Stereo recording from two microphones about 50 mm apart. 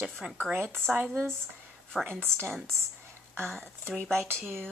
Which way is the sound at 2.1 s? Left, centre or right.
Right.